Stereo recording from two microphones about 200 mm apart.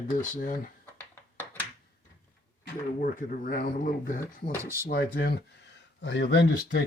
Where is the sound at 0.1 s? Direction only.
45° left (ahead or behind).